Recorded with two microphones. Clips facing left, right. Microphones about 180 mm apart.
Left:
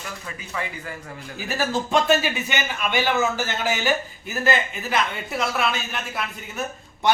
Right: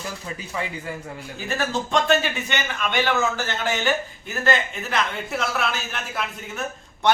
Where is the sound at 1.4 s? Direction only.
5° left (ahead or behind).